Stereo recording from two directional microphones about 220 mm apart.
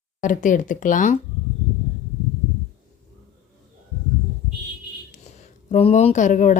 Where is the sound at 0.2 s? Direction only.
35° left (ahead or behind).